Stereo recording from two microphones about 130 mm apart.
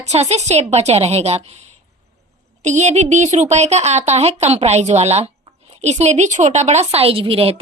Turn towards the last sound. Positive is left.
turn(degrees=-45)  # may be behind; listen again after turning